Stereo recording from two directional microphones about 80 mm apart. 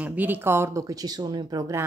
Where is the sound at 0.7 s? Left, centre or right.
Right.